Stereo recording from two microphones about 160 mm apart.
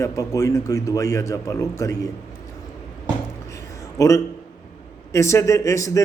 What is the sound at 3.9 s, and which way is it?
A man's voice, 20° left (ahead or behind).